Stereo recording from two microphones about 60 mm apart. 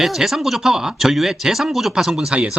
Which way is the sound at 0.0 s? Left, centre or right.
Centre.